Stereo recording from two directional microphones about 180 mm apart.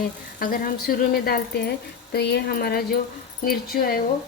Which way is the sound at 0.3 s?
55° left (ahead or behind).